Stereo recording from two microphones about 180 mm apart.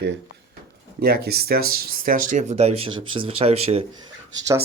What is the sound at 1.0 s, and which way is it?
Speech, 60° right (ahead or behind).